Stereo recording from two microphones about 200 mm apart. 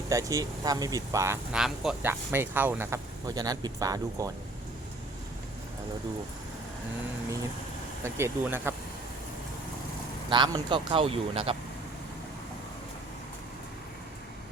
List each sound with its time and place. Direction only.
0.1 s speech: 15° right (ahead or behind)
1.5 s speech: centre (ahead or behind)
8.0 s speech: 10° right (ahead or behind)
10.2 s speech: 20° right (ahead or behind)